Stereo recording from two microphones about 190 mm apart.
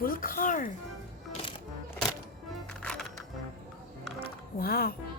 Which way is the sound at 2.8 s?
5° left (ahead or behind).